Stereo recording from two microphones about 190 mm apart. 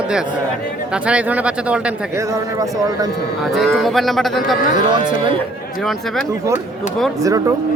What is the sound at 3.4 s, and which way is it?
Speech, centre (ahead or behind).